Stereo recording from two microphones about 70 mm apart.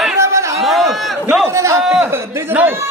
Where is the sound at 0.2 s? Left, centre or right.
Right.